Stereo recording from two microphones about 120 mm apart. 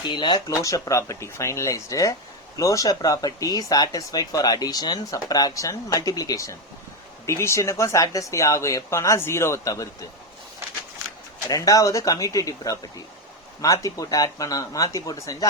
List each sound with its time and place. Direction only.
0.1 s speech: 40° left (ahead or behind)
11.4 s speech: 30° left (ahead or behind)